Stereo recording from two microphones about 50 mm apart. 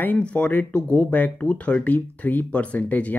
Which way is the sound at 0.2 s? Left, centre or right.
Left.